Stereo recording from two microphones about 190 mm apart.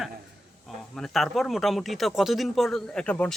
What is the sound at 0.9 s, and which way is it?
Speech, centre (ahead or behind).